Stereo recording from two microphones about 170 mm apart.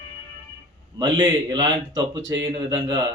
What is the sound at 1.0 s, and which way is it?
A man's voice, 25° right (ahead or behind).